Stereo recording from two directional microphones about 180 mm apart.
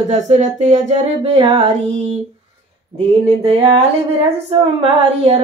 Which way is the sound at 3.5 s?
30° right (ahead or behind).